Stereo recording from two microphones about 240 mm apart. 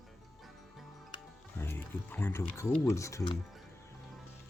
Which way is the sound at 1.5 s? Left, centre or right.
Centre.